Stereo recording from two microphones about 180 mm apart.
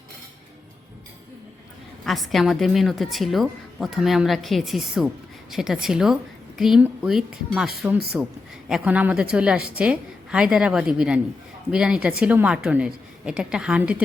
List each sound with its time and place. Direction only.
2.0 s a woman's voice: centre (ahead or behind)